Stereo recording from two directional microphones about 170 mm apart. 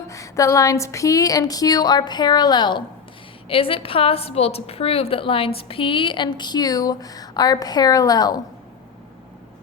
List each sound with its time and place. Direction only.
0.1 s a woman's voice: 20° left (ahead or behind)